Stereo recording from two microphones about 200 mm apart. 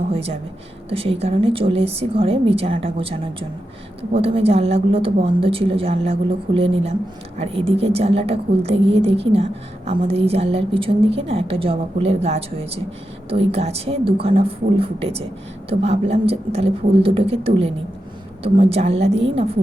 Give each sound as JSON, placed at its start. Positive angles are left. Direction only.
{"t": 0.1, "sound": "a woman's voice", "side_deg": -30}